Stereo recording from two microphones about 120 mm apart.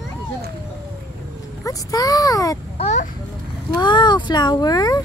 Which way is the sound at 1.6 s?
30° left (ahead or behind).